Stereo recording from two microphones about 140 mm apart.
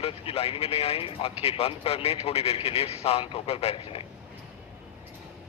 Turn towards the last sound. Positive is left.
turn(degrees=40)  # may be behind; listen again after turning